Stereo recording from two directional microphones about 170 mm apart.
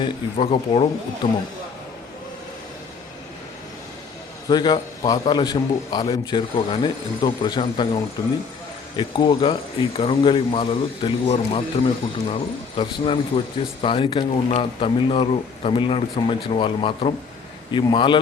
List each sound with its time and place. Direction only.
0.0 s speech: 35° left (ahead or behind)
4.4 s a man's voice: 25° left (ahead or behind)
9.0 s a man's voice: 25° left (ahead or behind)